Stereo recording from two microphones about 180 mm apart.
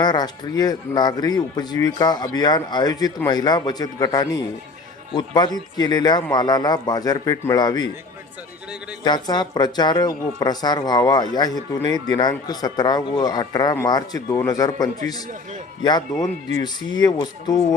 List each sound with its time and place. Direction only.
0.0 s a man's voice: 25° left (ahead or behind)
9.0 s a man's voice: 25° left (ahead or behind)